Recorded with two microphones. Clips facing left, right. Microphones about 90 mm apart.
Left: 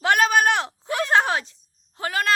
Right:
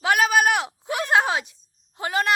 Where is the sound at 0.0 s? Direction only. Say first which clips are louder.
Left 1 dB; 5° right (ahead or behind).